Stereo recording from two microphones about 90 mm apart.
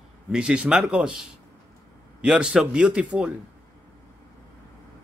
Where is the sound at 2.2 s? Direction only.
10° right (ahead or behind).